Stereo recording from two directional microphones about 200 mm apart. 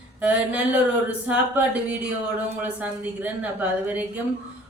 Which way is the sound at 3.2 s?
10° right (ahead or behind).